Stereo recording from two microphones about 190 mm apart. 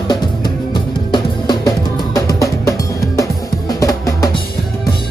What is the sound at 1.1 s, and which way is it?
Music, 20° left (ahead or behind).